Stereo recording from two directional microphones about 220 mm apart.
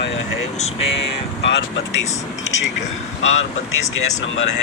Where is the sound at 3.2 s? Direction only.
60° left (ahead or behind).